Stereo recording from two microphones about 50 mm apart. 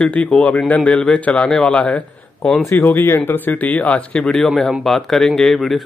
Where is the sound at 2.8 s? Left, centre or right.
Left.